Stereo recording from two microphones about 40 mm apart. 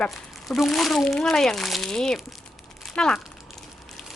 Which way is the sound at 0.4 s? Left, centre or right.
Centre.